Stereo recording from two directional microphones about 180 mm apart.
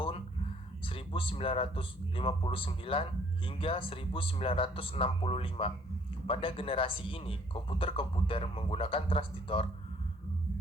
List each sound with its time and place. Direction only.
0.9 s speech: 30° left (ahead or behind)